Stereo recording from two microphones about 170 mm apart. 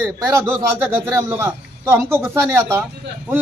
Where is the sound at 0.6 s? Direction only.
15° right (ahead or behind).